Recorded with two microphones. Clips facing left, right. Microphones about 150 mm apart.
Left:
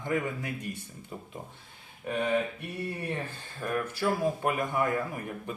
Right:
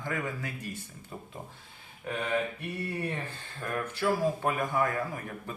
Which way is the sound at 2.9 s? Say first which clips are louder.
Even; 10° left (ahead or behind).